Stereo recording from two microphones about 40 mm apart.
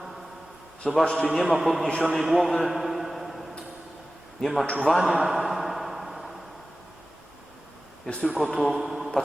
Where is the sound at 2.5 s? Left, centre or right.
Centre.